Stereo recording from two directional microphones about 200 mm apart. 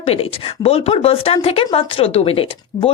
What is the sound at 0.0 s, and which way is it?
A woman's voice, 30° left (ahead or behind).